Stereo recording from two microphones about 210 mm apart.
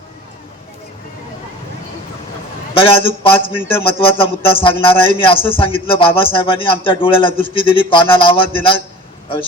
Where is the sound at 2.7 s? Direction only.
25° left (ahead or behind).